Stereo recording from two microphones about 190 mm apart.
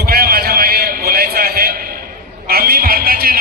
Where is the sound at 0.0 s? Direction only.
55° right (ahead or behind).